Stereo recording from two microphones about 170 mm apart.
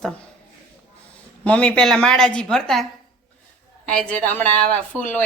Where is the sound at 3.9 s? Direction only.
5° left (ahead or behind).